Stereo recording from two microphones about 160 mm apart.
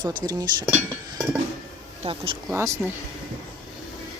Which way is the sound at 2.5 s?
15° right (ahead or behind).